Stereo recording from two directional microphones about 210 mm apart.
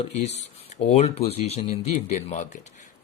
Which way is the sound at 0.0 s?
30° left (ahead or behind).